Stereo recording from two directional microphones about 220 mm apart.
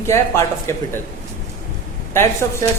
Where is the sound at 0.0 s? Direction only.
10° left (ahead or behind).